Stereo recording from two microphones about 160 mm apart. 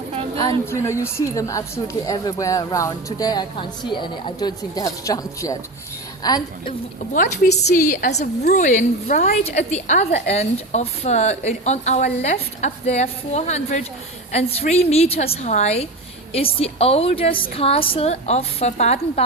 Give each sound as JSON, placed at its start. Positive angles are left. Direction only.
{"t": 0.3, "sound": "a woman's voice", "side_deg": 20}
{"t": 7.1, "sound": "a woman's voice", "side_deg": 50}